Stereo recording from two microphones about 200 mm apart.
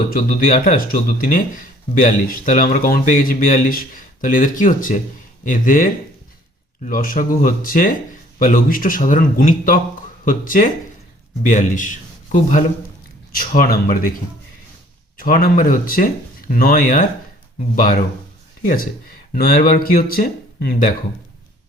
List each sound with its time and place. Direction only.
0.1 s speech: 45° left (ahead or behind)
2.0 s a man's voice: 40° left (ahead or behind)
15.2 s speech: 45° left (ahead or behind)
19.3 s speech: 45° left (ahead or behind)